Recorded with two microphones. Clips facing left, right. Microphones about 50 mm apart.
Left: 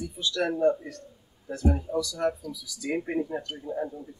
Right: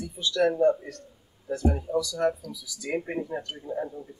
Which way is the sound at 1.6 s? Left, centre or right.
Centre.